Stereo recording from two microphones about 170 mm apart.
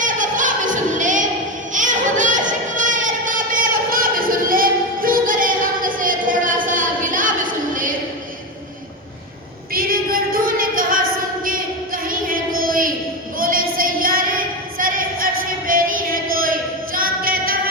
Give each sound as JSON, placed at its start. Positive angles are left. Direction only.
{"t": 0.0, "sound": "music", "side_deg": -50}
{"t": 1.7, "sound": "a sound", "side_deg": -50}
{"t": 9.7, "sound": "female singing", "side_deg": -60}
{"t": 12.0, "sound": "child singing", "side_deg": -55}
{"t": 13.4, "sound": "singing", "side_deg": -55}